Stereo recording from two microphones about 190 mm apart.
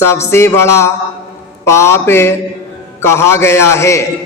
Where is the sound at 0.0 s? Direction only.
15° left (ahead or behind).